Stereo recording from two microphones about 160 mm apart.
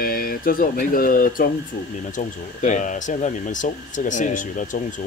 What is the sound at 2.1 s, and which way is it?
Speech, 50° left (ahead or behind).